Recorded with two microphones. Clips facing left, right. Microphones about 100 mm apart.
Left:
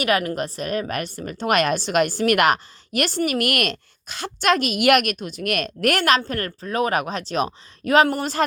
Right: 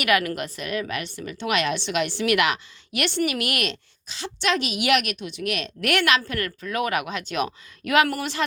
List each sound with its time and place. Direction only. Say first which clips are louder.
0.0 s a woman's voice: left 1 dB; 35° left (ahead or behind)